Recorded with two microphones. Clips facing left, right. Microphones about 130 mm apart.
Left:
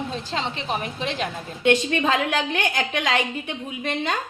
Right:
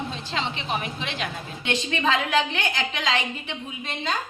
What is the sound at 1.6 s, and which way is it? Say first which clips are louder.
A woman's voice: left 6 dB; 50° left (ahead or behind).